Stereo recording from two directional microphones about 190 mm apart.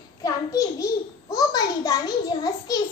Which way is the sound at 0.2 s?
20° left (ahead or behind).